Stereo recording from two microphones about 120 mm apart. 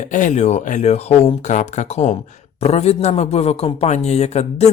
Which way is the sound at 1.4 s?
80° left.